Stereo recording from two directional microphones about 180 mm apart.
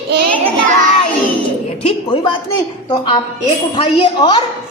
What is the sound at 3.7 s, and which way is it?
Speech, 25° left (ahead or behind).